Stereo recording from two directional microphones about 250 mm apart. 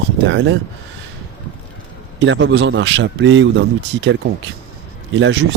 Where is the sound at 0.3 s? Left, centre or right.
Right.